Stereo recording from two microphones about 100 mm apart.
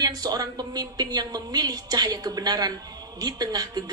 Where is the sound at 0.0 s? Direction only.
40° right (ahead or behind).